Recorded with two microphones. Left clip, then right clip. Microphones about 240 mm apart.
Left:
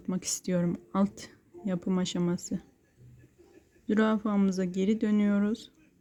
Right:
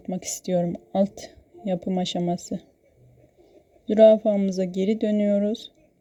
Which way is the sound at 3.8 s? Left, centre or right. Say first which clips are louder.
Right 14 dB; centre.